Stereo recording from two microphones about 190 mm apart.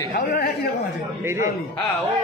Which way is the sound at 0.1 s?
55° left (ahead or behind).